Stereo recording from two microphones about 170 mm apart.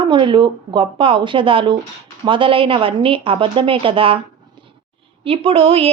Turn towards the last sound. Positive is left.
turn(degrees=-35)  # may be behind; listen again after turning